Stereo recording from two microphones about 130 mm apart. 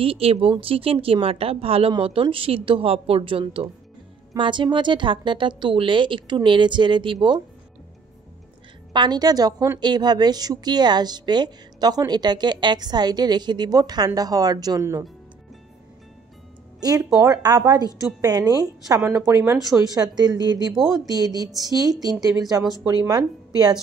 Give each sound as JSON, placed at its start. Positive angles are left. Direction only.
{"t": 0.0, "sound": "a woman's voice", "side_deg": -45}
{"t": 8.9, "sound": "a woman's voice", "side_deg": -35}
{"t": 16.8, "sound": "a woman's voice", "side_deg": -25}
{"t": 18.9, "sound": "a woman's voice", "side_deg": -20}